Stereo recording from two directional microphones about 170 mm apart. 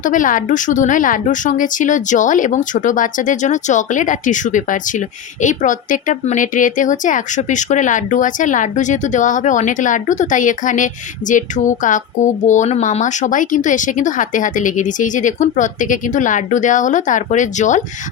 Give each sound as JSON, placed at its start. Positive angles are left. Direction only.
{"t": 0.0, "sound": "a woman's voice", "side_deg": 50}